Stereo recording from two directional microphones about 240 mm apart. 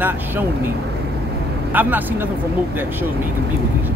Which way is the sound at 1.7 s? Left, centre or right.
Centre.